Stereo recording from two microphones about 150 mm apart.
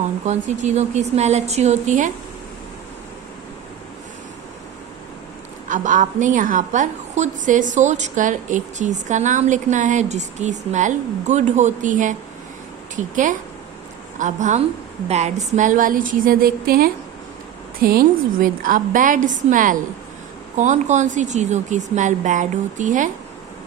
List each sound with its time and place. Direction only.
0.0 s speech: 50° right (ahead or behind)
5.6 s a woman's voice: 60° right (ahead or behind)
14.2 s a woman's voice: 55° right (ahead or behind)
15.5 s a woman's voice: 60° right (ahead or behind)